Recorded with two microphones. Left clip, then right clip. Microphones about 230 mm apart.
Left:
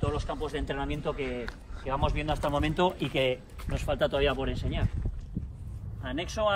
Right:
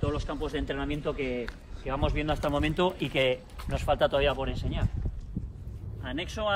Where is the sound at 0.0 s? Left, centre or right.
Left.